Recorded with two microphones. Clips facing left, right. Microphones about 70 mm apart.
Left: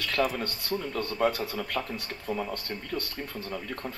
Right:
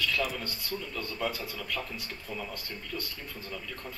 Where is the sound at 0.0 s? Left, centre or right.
Left.